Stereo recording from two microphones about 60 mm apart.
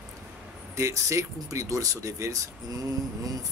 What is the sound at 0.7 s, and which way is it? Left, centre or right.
Speech, right.